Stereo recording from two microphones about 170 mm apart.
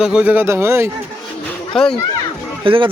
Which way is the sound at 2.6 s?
30° right (ahead or behind).